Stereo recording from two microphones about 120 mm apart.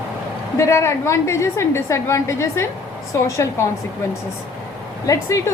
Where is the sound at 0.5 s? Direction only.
25° left (ahead or behind).